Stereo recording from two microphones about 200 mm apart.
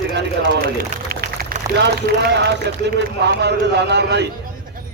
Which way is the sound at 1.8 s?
60° right (ahead or behind).